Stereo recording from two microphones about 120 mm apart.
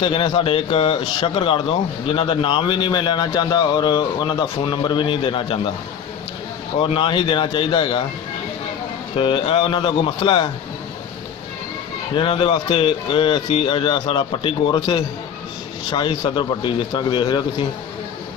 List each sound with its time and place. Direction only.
0.0 s a man's voice: 45° left (ahead or behind)
6.8 s speech: 45° left (ahead or behind)
9.1 s speech: 45° left (ahead or behind)
12.2 s speech: 45° left (ahead or behind)
15.9 s a man's voice: 40° left (ahead or behind)